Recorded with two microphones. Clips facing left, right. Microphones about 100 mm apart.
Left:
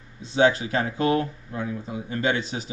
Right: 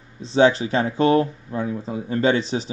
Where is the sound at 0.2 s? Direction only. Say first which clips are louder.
Right 4 dB; 30° right (ahead or behind).